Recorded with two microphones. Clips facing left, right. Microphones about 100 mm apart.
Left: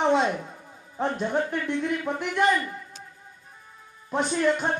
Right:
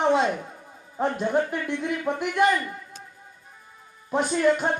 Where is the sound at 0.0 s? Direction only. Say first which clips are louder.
Right 1 dB; centre (ahead or behind).